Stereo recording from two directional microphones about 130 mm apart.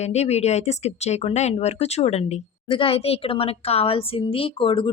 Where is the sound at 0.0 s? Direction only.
55° left (ahead or behind).